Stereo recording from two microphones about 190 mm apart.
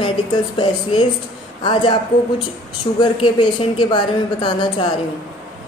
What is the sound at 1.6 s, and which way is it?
A woman's voice, 25° left (ahead or behind).